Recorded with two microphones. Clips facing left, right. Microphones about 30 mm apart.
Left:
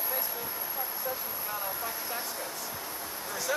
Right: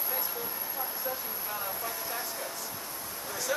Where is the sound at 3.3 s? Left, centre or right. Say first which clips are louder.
Even; centre.